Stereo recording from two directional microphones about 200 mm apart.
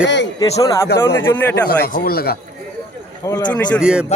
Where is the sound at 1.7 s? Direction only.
50° left (ahead or behind).